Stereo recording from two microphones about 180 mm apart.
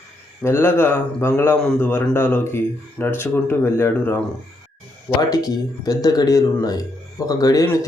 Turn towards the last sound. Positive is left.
turn(degrees=20)  # may be behind; listen again after turning